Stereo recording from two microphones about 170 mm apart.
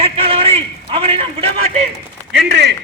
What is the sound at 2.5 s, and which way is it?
Speech, 75° right (ahead or behind).